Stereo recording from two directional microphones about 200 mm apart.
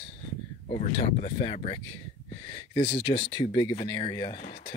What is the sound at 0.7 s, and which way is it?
Speech, 35° left (ahead or behind).